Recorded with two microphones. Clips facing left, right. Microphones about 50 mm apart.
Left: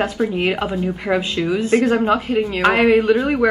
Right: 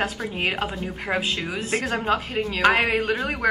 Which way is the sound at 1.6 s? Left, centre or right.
Left.